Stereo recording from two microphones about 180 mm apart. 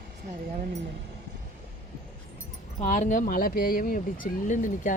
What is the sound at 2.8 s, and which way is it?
Speech, 45° left (ahead or behind).